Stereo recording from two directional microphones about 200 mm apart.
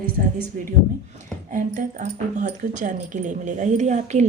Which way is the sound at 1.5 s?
40° right (ahead or behind).